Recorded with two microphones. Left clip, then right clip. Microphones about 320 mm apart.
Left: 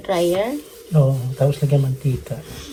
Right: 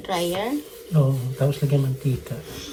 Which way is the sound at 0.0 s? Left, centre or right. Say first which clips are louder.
Left 6 dB; centre.